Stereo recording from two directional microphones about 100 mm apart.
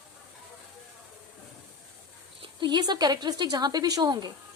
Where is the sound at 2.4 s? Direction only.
50° right (ahead or behind).